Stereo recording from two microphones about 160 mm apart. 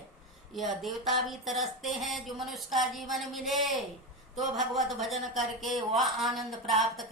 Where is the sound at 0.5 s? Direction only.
Centre (ahead or behind).